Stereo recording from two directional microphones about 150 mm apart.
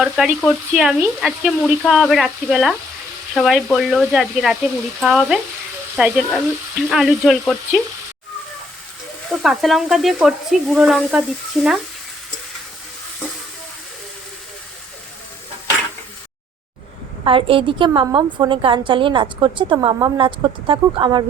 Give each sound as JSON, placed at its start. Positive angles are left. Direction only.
{"t": 0.0, "sound": "speech", "side_deg": -5}
{"t": 9.3, "sound": "speech", "side_deg": 0}
{"t": 17.2, "sound": "a woman's voice", "side_deg": -35}